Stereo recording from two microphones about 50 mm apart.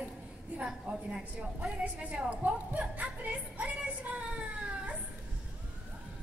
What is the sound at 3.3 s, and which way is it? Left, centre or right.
Music, right.